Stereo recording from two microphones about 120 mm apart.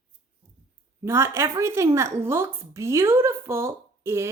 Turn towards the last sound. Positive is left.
turn(degrees=-20)  # may be behind; listen again after turning